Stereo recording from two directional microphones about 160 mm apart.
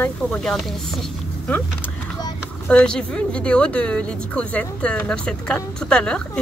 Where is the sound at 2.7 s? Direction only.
5° left (ahead or behind).